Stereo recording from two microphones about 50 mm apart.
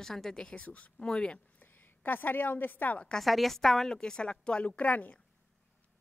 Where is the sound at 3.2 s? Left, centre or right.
Centre.